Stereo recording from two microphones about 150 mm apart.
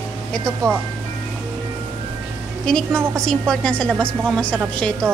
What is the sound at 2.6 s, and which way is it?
A woman's voice, 5° left (ahead or behind).